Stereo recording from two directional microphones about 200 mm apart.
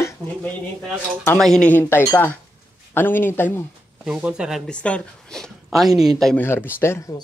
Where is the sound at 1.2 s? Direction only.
5° left (ahead or behind).